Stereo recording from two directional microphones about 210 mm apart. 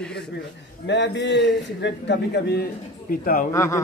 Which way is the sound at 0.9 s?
55° left (ahead or behind).